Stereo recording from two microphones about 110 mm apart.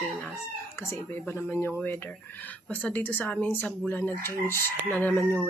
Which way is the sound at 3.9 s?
20° left (ahead or behind).